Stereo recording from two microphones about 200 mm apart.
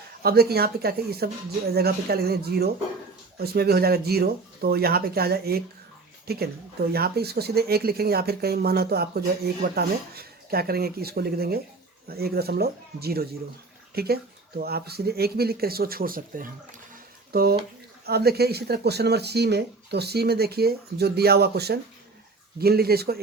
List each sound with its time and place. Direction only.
0.2 s speech: 50° right (ahead or behind)